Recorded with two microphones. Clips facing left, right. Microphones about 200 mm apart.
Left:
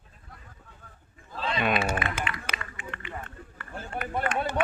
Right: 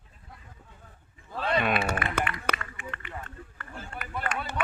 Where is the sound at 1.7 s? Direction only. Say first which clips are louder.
Even; 60° right (ahead or behind).